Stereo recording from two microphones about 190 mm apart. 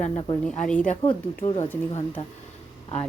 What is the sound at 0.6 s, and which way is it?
Speech, 5° left (ahead or behind).